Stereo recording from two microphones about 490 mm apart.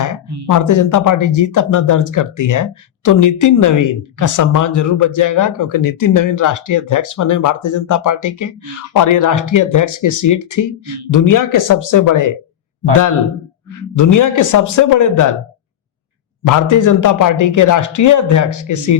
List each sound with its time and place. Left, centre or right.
0.5 s speech: left
13.7 s speech: left
16.4 s speech: left